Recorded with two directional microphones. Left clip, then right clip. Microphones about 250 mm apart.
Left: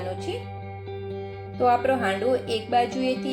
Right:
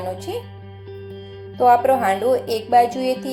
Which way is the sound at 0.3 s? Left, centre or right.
Right.